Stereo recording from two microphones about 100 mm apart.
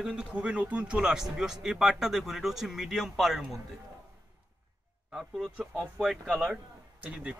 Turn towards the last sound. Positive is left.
turn(degrees=-10)  # may be behind; listen again after turning